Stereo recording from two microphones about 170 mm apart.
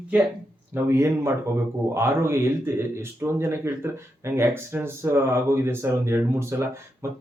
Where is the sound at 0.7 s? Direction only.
15° right (ahead or behind).